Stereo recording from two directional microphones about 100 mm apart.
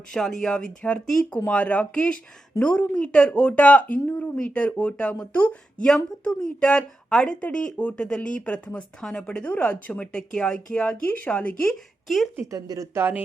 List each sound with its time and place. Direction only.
0.1 s speech: 5° left (ahead or behind)
12.0 s speech: centre (ahead or behind)
12.4 s speech: 35° right (ahead or behind)
12.9 s speech: 20° right (ahead or behind)